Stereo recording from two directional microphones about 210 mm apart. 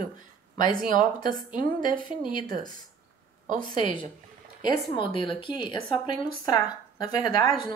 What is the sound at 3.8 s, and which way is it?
Speech, 25° left (ahead or behind).